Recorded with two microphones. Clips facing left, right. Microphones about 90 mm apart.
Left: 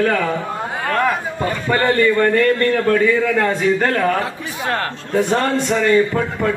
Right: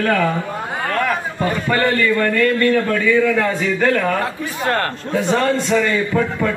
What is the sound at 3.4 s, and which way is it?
Speech, 45° left (ahead or behind).